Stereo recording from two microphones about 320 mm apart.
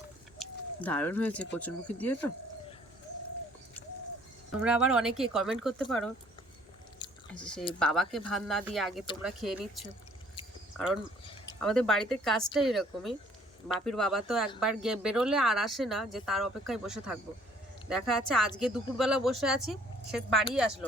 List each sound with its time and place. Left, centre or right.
0.3 s speech: centre
4.6 s speech: centre
7.3 s speech: centre
10.8 s speech: centre